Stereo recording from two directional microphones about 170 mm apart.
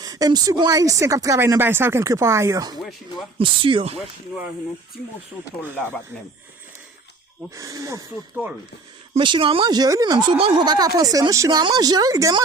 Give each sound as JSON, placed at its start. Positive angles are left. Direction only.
{"t": 0.0, "sound": "speech", "side_deg": -20}
{"t": 3.3, "sound": "speech", "side_deg": -30}
{"t": 5.7, "sound": "speech", "side_deg": 15}
{"t": 7.5, "sound": "speech", "side_deg": -20}
{"t": 9.1, "sound": "speech", "side_deg": -30}